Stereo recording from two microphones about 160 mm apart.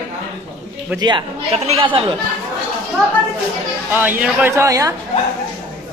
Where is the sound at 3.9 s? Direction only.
10° right (ahead or behind).